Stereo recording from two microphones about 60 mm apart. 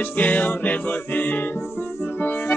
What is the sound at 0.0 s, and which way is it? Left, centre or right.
Music, left.